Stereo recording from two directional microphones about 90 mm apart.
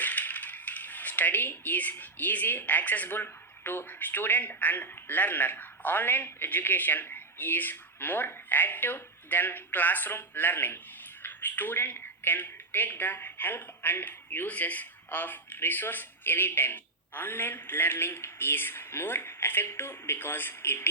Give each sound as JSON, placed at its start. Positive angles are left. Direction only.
{"t": 0.0, "sound": "speech", "side_deg": 20}